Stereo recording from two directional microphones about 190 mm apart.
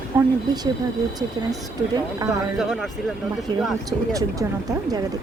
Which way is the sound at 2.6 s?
Centre (ahead or behind).